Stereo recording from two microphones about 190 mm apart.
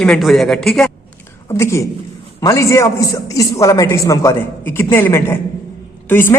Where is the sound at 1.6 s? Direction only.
15° left (ahead or behind).